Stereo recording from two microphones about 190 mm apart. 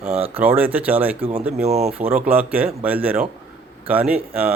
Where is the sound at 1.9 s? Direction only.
10° right (ahead or behind).